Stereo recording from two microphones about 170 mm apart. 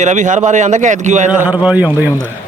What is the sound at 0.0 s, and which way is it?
A man's voice, 45° right (ahead or behind).